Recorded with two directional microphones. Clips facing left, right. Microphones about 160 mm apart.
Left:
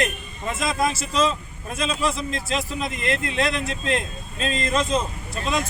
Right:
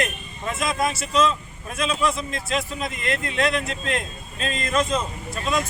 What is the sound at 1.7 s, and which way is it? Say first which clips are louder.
Speech: right 1 dB; 30° left (ahead or behind).